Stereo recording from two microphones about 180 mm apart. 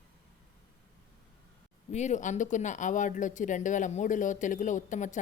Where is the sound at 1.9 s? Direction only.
40° left (ahead or behind).